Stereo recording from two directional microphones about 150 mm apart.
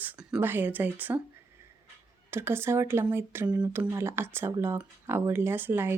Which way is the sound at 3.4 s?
25° right (ahead or behind).